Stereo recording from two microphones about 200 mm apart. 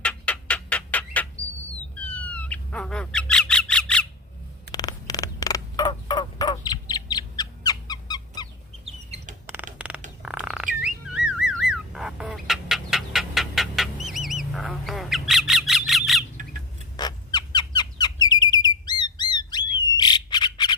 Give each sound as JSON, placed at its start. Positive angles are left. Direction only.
{"t": 0.0, "sound": "bird", "side_deg": 5}
{"t": 2.0, "sound": "squawk", "side_deg": 5}
{"t": 4.7, "sound": "a sound", "side_deg": 20}
{"t": 8.9, "sound": "chicken", "side_deg": -30}
{"t": 9.7, "sound": "a sound", "side_deg": -5}
{"t": 10.2, "sound": "bird", "side_deg": -5}
{"t": 10.8, "sound": "car alarm", "side_deg": -5}
{"t": 11.7, "sound": "bird", "side_deg": -5}
{"t": 17.0, "sound": "squeak", "side_deg": 20}
{"t": 17.7, "sound": "bird", "side_deg": 20}